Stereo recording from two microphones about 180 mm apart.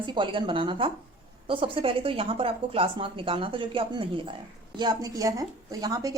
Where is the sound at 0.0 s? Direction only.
25° right (ahead or behind).